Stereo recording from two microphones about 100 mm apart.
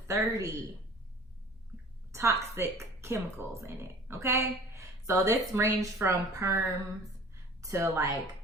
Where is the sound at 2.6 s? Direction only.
25° right (ahead or behind).